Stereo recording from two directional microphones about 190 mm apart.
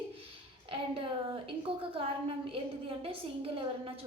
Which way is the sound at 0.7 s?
30° right (ahead or behind).